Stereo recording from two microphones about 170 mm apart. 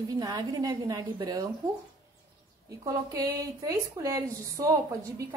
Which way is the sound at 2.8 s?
20° right (ahead or behind).